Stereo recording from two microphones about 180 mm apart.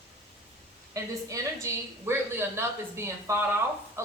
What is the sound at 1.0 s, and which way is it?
Speech, 20° right (ahead or behind).